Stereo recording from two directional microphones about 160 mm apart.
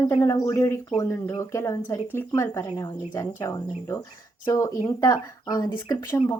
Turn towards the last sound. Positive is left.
turn(degrees=20)  # may be behind; listen again after turning